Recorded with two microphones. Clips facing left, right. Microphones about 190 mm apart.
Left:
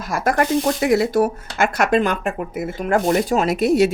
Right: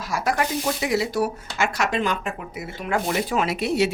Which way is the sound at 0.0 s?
50° left (ahead or behind).